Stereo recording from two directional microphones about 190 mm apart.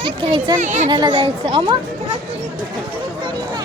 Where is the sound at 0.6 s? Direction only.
40° right (ahead or behind).